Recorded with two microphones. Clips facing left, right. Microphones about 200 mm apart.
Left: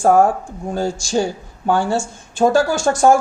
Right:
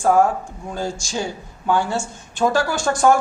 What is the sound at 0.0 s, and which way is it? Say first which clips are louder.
Speech: left 3 dB; 50° left (ahead or behind).